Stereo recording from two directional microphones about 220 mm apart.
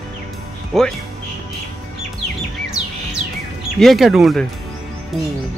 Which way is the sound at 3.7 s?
Centre (ahead or behind).